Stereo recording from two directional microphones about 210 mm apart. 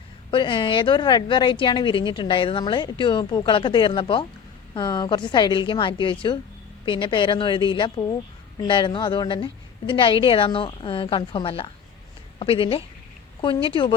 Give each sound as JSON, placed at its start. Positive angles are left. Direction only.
{"t": 0.3, "sound": "a woman's voice", "side_deg": 25}